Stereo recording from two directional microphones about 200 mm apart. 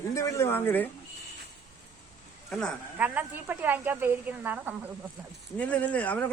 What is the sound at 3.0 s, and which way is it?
A woman's voice, 10° right (ahead or behind).